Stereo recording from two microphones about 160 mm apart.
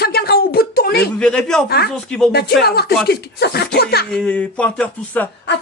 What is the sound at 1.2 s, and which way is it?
Speech, 5° left (ahead or behind).